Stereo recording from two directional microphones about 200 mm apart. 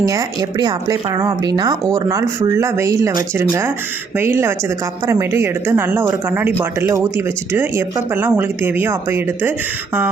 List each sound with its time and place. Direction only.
0.0 s speech: 20° right (ahead or behind)